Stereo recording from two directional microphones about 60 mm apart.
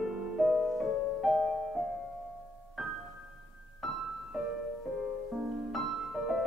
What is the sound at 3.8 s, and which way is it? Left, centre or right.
Music, centre.